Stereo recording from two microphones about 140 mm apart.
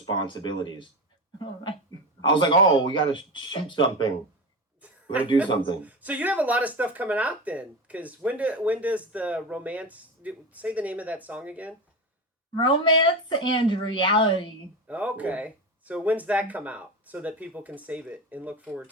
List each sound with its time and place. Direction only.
0.0 s speech: 35° left (ahead or behind)
4.8 s a sound: 10° right (ahead or behind)
5.8 s speech: 10° right (ahead or behind)
12.5 s speech: 35° left (ahead or behind)
14.8 s speech: 10° right (ahead or behind)